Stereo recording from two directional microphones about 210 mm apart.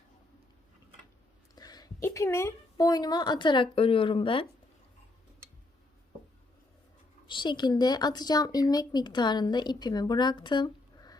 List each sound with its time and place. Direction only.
1.5 s a woman's voice: 20° left (ahead or behind)
7.3 s speech: 20° left (ahead or behind)